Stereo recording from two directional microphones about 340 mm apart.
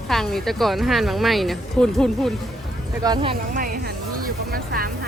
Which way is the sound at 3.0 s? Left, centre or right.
Centre.